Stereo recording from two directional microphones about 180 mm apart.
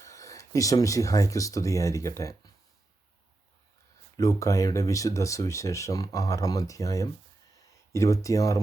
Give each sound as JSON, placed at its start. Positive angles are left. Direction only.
{"t": 0.0, "sound": "speech", "side_deg": 15}
{"t": 4.2, "sound": "speech", "side_deg": 20}